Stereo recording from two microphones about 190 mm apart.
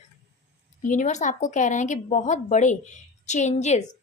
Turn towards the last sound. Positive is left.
turn(degrees=35)  # may be behind; listen again after turning